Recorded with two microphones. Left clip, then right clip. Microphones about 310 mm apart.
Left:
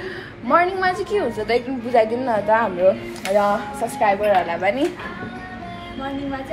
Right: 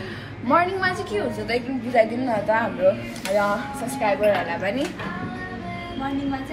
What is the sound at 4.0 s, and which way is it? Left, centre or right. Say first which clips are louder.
Speech: left 3 dB; left.